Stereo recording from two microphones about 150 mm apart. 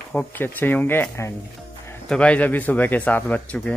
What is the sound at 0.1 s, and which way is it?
Speech, 10° left (ahead or behind).